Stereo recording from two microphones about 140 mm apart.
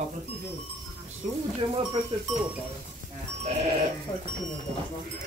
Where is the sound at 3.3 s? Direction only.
50° right (ahead or behind).